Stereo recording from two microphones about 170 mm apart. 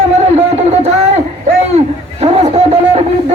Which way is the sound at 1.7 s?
40° right (ahead or behind).